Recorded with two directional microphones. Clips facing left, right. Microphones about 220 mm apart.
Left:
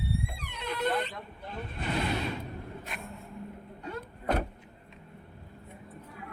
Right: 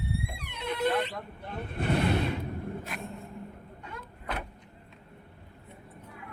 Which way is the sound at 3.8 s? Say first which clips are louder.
Left 8 dB; 35° left (ahead or behind).